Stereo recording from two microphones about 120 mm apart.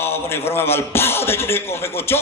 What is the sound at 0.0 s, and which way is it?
A man's voice, 20° left (ahead or behind).